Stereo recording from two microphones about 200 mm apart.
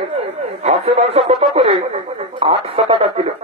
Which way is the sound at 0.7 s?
35° right (ahead or behind).